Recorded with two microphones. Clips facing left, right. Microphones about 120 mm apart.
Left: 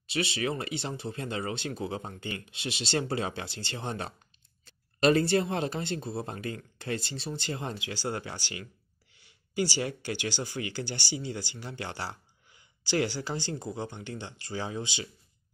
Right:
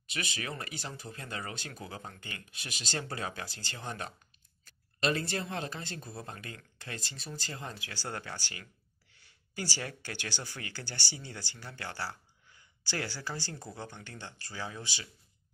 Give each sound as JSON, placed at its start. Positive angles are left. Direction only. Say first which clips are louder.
{"t": 0.0, "sound": "speech", "louder": "left 9 dB", "side_deg": 30}
{"t": 7.9, "sound": "speech", "louder": "left 5 dB", "side_deg": 15}
{"t": 9.1, "sound": "a sound", "louder": "left 11 dB", "side_deg": 15}
{"t": 9.8, "sound": "speech", "louder": "left 8 dB", "side_deg": 15}